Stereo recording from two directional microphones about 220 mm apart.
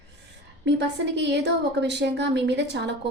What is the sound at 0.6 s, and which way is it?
A woman's voice, 50° right (ahead or behind).